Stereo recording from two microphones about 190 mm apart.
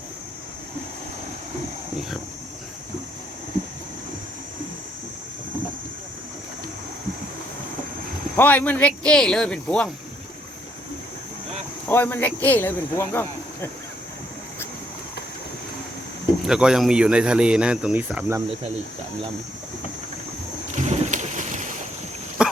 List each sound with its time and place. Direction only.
8.4 s speech: 10° left (ahead or behind)
11.9 s speech: 10° left (ahead or behind)
16.5 s speech: 5° right (ahead or behind)
20.7 s boat: 40° right (ahead or behind)
22.4 s dog: 5° right (ahead or behind)